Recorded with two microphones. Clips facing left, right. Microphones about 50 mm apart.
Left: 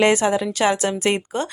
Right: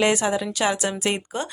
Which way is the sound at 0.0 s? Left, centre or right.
Left.